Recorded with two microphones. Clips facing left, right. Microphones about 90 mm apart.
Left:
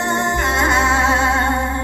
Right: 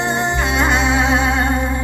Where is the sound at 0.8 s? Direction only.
55° left (ahead or behind).